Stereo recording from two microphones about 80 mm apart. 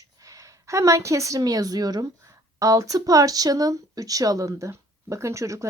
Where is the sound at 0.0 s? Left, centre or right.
Right.